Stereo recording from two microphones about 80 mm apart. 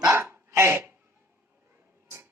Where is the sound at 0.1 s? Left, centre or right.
Right.